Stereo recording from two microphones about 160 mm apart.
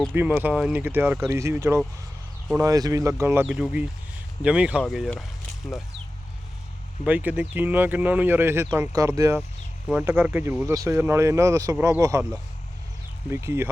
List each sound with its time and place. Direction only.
0.1 s speech: 10° right (ahead or behind)
3.4 s speech: 5° right (ahead or behind)
7.0 s speech: 10° right (ahead or behind)